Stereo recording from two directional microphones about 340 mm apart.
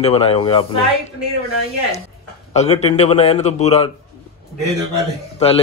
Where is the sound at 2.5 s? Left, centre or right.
Centre.